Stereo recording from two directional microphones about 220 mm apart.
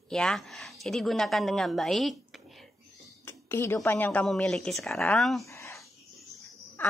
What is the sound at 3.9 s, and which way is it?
A woman's voice, 10° left (ahead or behind).